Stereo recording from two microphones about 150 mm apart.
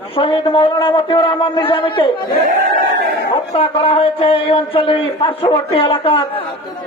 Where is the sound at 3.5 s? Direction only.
40° left (ahead or behind).